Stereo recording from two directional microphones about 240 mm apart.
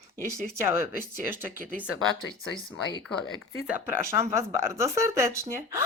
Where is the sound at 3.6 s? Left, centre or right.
Centre.